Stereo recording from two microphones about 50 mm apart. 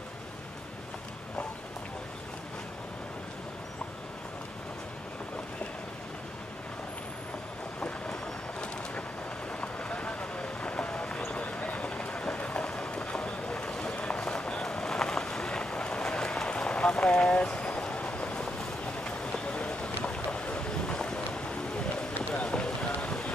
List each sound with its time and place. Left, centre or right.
7.8 s vehicle: left
9.6 s a sound: left
11.3 s run: left
14.6 s vehicle: centre